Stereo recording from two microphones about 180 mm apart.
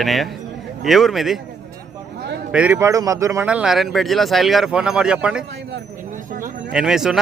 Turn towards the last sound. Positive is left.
turn(degrees=-5)  # may be behind; listen again after turning